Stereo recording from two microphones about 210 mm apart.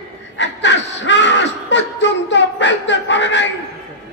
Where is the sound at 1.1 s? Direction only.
60° left (ahead or behind).